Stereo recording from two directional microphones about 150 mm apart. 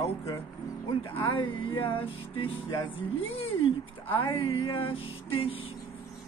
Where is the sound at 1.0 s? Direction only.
35° left (ahead or behind).